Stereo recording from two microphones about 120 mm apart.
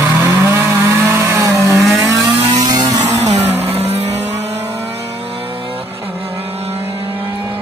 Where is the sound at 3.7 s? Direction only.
55° right (ahead or behind).